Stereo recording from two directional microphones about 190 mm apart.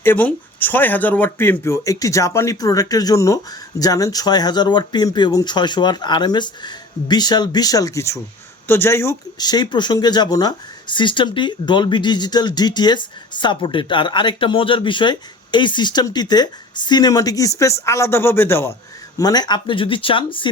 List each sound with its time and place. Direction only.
0.0 s speech: 10° left (ahead or behind); by 20.5 s 25° left (ahead or behind)